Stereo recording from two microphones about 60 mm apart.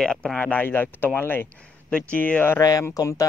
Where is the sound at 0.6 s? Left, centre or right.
Left.